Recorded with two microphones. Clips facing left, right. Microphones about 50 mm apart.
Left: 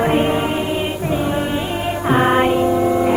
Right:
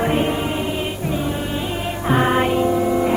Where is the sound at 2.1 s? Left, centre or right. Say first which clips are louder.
Left 3 dB; centre.